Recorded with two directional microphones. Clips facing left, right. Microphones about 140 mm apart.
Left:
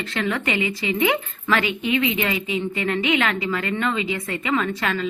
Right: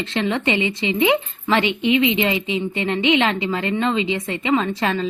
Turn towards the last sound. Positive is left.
turn(degrees=-30)  # may be behind; listen again after turning